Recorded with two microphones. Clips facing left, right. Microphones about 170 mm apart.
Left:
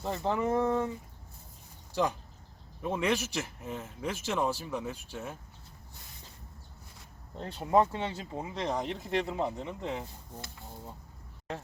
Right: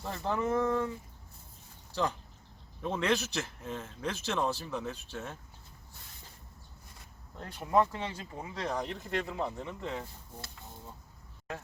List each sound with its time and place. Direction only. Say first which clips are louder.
0.0 s speech: left 2 dB; 20° left (ahead or behind)
2.8 s a man's voice: left 1 dB; 10° left (ahead or behind)
7.3 s speech: left 2 dB; 25° left (ahead or behind)